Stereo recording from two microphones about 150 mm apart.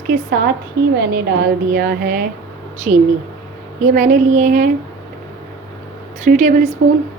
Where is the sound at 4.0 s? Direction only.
60° right (ahead or behind).